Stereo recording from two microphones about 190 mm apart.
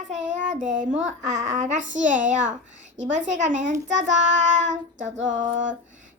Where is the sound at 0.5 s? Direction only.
40° right (ahead or behind).